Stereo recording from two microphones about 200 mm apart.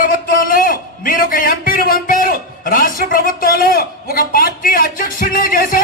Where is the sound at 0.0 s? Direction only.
45° left (ahead or behind).